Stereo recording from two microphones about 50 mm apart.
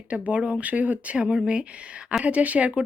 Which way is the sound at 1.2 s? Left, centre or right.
Right.